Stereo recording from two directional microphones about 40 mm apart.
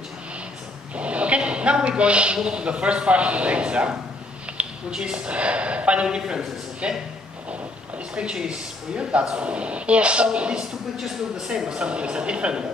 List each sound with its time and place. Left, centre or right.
0.9 s a man's voice: right
6.0 s speech: centre
8.1 s speech: right
11.0 s speech: centre
11.7 s speech: right